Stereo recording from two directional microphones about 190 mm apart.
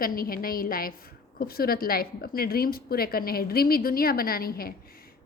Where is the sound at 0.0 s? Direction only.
50° left (ahead or behind).